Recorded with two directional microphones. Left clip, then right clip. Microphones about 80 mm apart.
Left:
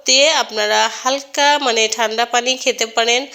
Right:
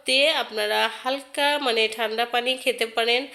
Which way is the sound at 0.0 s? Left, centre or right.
Left.